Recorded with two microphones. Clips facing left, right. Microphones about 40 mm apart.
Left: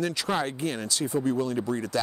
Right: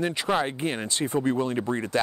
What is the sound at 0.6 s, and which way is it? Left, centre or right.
Speech, right.